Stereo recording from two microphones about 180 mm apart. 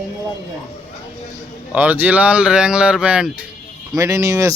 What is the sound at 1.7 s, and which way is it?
Speech, 10° right (ahead or behind).